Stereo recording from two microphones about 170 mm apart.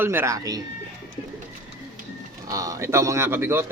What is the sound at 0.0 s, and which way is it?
Speech, 15° right (ahead or behind).